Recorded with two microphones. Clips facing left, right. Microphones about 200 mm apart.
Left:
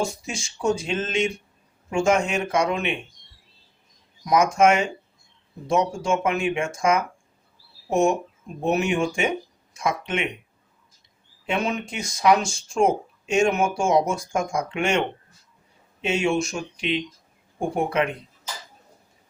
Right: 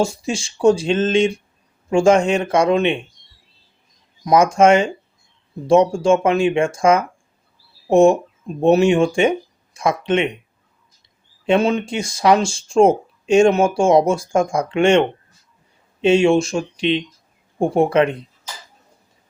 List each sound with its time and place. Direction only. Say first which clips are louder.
0.3 s speech: right 12 dB; 30° right (ahead or behind)
4.3 s speech: right 5 dB; 30° right (ahead or behind)
11.4 s speech: right 9 dB; 30° right (ahead or behind)